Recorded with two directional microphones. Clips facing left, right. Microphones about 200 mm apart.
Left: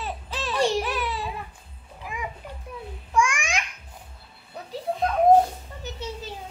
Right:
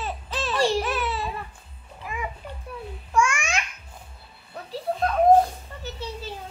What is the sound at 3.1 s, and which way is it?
Babbling, 15° left (ahead or behind).